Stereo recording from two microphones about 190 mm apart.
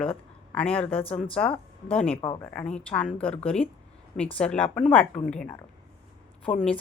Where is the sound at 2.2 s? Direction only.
25° left (ahead or behind).